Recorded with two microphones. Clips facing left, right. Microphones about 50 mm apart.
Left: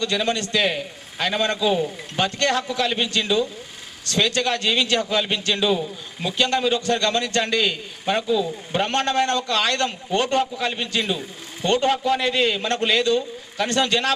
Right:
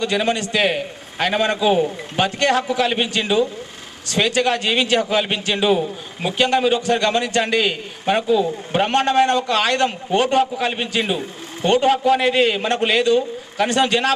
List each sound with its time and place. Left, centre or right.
0.0 s a man's voice: centre
0.6 s a man's voice: right